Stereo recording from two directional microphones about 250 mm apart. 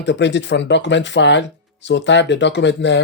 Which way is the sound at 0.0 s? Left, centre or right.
Left.